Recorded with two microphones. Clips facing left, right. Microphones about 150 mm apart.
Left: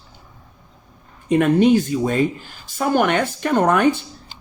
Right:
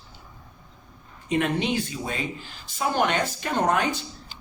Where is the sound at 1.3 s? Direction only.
50° left (ahead or behind).